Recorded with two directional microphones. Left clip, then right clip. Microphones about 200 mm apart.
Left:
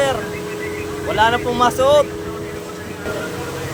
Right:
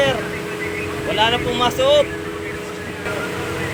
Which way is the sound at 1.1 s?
10° left (ahead or behind).